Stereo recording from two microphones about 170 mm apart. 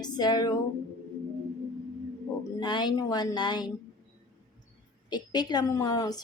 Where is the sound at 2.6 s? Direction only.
25° left (ahead or behind).